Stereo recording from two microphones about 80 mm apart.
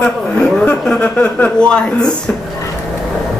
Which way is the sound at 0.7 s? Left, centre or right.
Left.